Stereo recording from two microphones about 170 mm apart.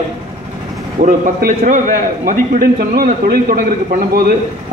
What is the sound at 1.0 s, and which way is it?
A man's voice, 50° right (ahead or behind).